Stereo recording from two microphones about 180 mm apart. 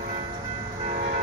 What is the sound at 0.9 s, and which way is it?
Train, 55° right (ahead or behind).